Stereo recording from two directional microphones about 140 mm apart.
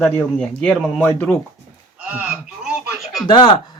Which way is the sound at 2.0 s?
10° right (ahead or behind).